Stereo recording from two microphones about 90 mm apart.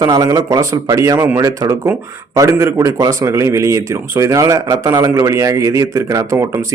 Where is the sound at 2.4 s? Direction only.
35° right (ahead or behind).